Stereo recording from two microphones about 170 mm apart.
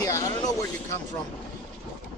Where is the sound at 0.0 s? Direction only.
20° left (ahead or behind).